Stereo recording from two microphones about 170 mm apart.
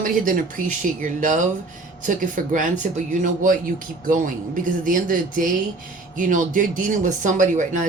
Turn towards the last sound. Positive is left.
turn(degrees=-45)  # may be behind; listen again after turning